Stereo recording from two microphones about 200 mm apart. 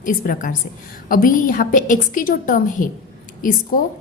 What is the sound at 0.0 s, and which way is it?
A woman's voice, 40° left (ahead or behind).